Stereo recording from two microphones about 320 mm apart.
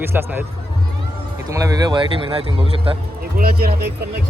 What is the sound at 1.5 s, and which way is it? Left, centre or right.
Speech, centre.